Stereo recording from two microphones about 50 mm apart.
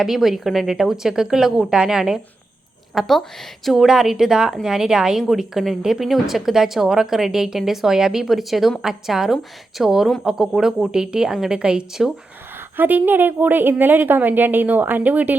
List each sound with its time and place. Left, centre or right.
0.0 s a woman's voice: centre
12.7 s a woman's voice: right